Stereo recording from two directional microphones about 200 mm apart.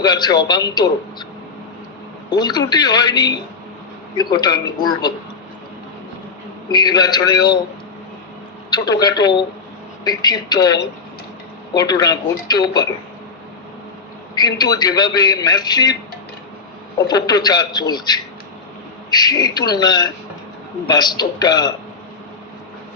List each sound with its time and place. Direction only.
0.0 s a man's voice: 20° left (ahead or behind)
2.3 s a man's voice: 20° left (ahead or behind)
6.7 s a man's voice: 20° left (ahead or behind)
8.7 s a man's voice: 20° left (ahead or behind)
14.3 s a man's voice: 20° left (ahead or behind)
17.1 s a man's voice: 20° left (ahead or behind)